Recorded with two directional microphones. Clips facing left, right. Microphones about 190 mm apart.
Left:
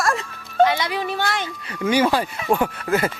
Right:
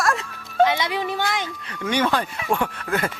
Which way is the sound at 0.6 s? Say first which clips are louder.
Left 1 dB; 20° right (ahead or behind).